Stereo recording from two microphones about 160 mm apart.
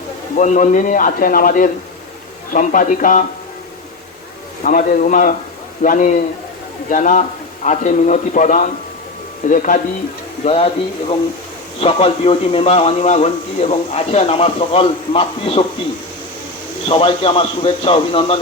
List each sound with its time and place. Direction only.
0.3 s speech: 50° left (ahead or behind)
4.6 s a man's voice: 60° left (ahead or behind)
10.4 s speech: 40° left (ahead or behind)
11.8 s speech: 35° left (ahead or behind)
16.9 s speech: 35° left (ahead or behind)